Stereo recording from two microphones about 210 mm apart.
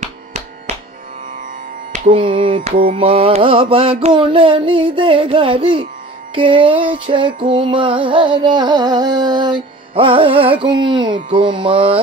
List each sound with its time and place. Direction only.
0.0 s music: 30° right (ahead or behind)
2.0 s music: 25° right (ahead or behind)